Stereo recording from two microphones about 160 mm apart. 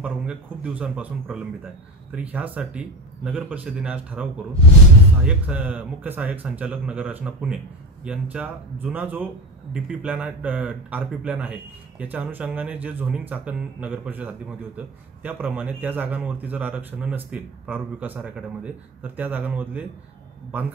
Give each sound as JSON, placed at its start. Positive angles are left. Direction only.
{"t": 0.0, "sound": "a man's voice", "side_deg": -10}